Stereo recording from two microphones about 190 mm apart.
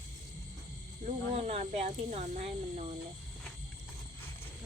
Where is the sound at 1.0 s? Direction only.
35° right (ahead or behind).